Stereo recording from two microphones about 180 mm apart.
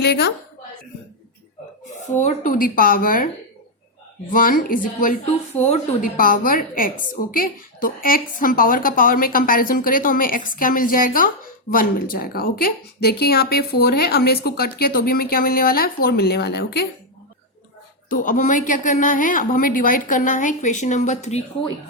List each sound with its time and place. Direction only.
0.0 s speech: 65° left (ahead or behind)
2.2 s a woman's voice: 45° left (ahead or behind)
4.3 s a woman's voice: 50° left (ahead or behind)
6.1 s a woman's voice: 50° left (ahead or behind); by 16.8 s 65° left (ahead or behind)
18.1 s a woman's voice: 45° left (ahead or behind)